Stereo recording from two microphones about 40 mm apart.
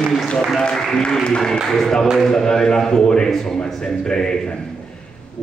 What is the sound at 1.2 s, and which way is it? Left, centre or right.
A man's voice, centre.